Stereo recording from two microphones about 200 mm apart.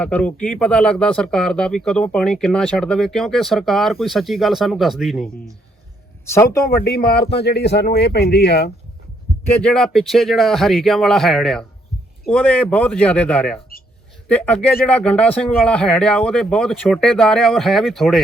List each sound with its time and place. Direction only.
0.0 s speech: 5° left (ahead or behind)
6.3 s speech: 15° left (ahead or behind)
6.7 s speech: 50° left (ahead or behind)
9.5 s speech: 5° left (ahead or behind)